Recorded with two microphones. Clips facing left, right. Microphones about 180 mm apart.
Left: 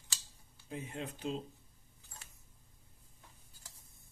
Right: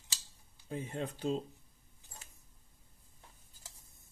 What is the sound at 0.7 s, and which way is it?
Speech, 35° right (ahead or behind).